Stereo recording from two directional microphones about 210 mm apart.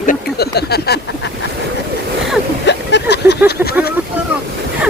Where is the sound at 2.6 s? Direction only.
55° left (ahead or behind).